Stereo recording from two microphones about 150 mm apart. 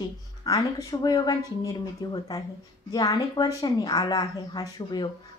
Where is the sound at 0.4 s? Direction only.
25° left (ahead or behind).